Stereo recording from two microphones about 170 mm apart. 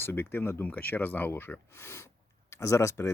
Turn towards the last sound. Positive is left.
turn(degrees=15)  # may be behind; listen again after turning